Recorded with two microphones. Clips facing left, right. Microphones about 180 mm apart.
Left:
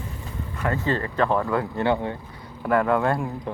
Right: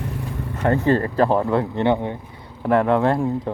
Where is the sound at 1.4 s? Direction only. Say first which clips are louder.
Right 4 dB; 25° right (ahead or behind).